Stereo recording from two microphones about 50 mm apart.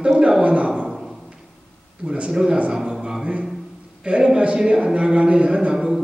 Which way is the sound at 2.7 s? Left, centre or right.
Centre.